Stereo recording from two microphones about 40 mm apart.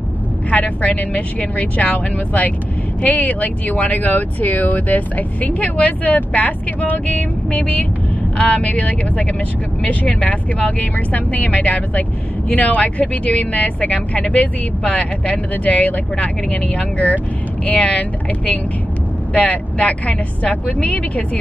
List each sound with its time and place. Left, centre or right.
0.5 s speech: left